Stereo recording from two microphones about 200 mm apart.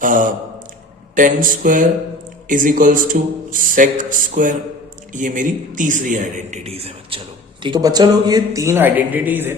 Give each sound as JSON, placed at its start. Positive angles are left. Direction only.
{"t": 0.0, "sound": "a man's voice", "side_deg": -40}